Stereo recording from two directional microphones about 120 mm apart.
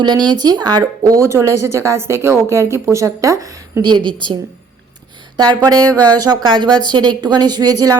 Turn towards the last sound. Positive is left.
turn(degrees=-30)  # may be behind; listen again after turning